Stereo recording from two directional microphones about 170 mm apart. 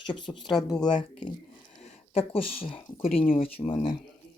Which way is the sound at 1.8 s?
35° left (ahead or behind).